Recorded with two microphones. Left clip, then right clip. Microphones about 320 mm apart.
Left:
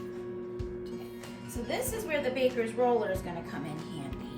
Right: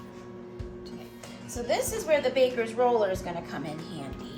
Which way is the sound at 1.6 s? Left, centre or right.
Centre.